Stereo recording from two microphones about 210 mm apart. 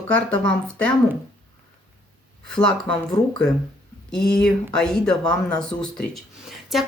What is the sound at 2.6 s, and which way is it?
Speech, 5° left (ahead or behind).